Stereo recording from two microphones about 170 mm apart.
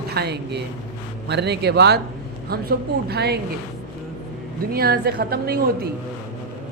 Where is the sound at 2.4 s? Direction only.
65° right (ahead or behind).